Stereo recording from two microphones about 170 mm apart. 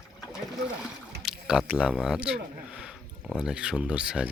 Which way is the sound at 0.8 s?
5° right (ahead or behind).